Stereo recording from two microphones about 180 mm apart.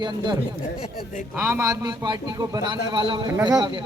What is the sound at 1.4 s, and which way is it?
A man's voice, 10° right (ahead or behind).